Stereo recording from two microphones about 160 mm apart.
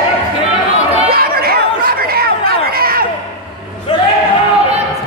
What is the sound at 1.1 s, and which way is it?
Chatter, 70° right (ahead or behind).